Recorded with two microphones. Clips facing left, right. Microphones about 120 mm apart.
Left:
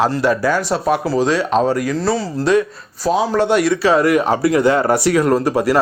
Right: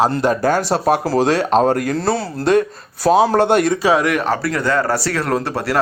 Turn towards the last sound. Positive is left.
turn(degrees=5)  # may be behind; listen again after turning